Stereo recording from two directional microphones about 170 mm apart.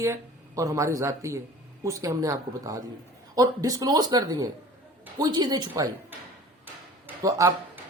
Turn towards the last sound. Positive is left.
turn(degrees=-20)  # may be behind; listen again after turning